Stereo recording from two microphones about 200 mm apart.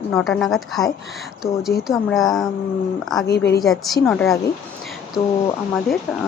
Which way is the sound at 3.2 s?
55° left (ahead or behind).